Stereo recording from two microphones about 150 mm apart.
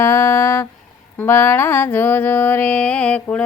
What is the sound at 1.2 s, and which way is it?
Speech, 15° left (ahead or behind).